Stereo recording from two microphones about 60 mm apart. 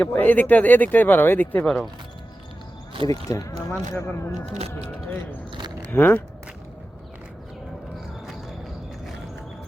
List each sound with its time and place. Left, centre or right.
0.0 s speech: left
3.1 s speech: left
3.7 s speech: left
5.9 s speech: left